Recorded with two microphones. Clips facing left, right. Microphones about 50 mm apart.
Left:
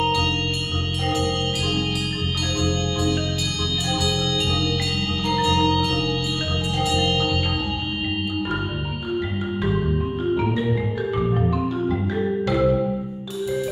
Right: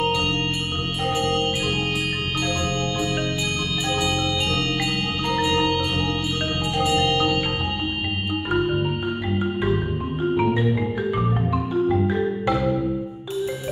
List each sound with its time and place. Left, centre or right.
1.0 s organ: centre
5.3 s marimba: right
6.8 s music: right